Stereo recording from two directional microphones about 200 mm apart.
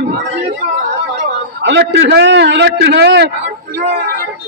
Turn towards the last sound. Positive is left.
turn(degrees=-60)  # may be behind; listen again after turning